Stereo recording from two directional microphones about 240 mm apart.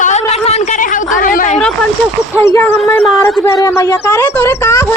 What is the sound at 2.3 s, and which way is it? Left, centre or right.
Speech, centre.